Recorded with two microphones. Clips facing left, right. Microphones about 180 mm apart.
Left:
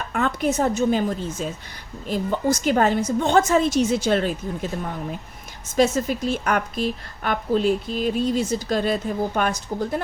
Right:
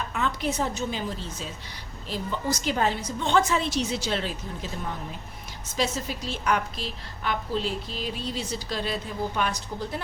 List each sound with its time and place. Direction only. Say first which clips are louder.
0.1 s a woman's voice: left 8 dB; 50° left (ahead or behind)
5.7 s a woman's voice: left 9 dB; 50° left (ahead or behind)